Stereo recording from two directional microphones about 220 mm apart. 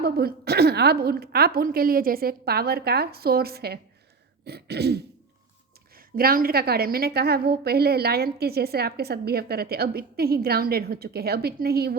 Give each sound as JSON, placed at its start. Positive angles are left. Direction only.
{"t": 0.0, "sound": "a woman's voice", "side_deg": -45}